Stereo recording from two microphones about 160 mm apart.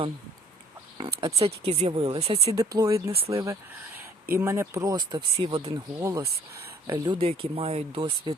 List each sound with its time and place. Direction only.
1.4 s speech: 40° right (ahead or behind)
2.5 s speech: 20° right (ahead or behind)
3.1 s speech: 35° right (ahead or behind)
3.3 s speech: 20° right (ahead or behind); by 5.7 s 35° right (ahead or behind)
5.7 s speech: 20° right (ahead or behind)